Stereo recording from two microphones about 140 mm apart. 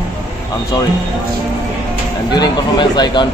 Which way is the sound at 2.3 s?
30° left (ahead or behind).